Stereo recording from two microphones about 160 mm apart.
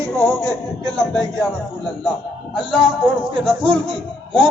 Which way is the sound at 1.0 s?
Centre (ahead or behind).